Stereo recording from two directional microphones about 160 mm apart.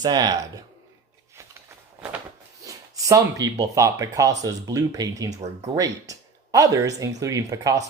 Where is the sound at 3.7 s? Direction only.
20° right (ahead or behind).